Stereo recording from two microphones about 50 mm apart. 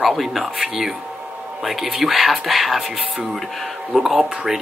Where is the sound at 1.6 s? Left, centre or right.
Centre.